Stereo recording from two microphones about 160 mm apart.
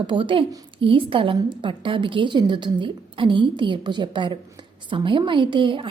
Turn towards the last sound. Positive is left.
turn(degrees=-30)  # may be behind; listen again after turning